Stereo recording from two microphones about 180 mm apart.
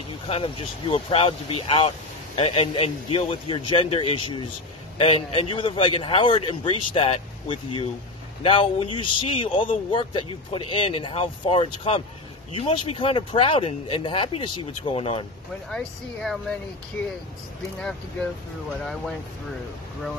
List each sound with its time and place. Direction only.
0.3 s speech: 30° left (ahead or behind)
15.7 s speech: 5° left (ahead or behind)